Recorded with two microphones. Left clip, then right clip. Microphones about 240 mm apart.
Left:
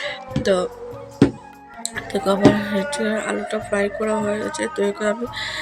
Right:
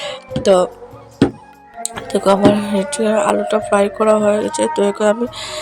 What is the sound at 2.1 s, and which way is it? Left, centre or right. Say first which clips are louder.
Speech: right 5 dB; centre.